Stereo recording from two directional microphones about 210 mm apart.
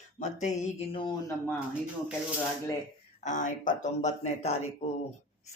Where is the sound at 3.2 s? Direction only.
35° left (ahead or behind).